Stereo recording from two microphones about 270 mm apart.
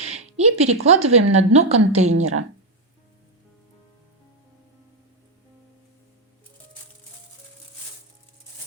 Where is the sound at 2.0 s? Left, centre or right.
Right.